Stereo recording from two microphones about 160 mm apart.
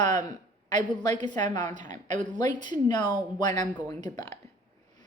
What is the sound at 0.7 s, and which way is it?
Speech, 25° left (ahead or behind).